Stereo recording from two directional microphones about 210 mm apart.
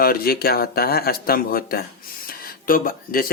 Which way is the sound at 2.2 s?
45° left (ahead or behind).